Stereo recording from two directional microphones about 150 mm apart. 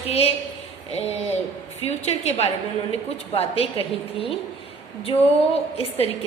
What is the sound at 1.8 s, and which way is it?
A woman's voice, 45° left (ahead or behind).